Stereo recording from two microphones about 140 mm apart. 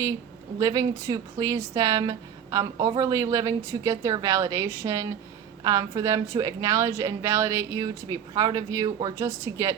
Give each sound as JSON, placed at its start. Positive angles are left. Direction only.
{"t": 0.6, "sound": "speech", "side_deg": -25}